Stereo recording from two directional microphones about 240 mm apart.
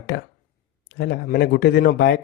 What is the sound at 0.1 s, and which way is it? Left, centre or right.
A man's voice, left.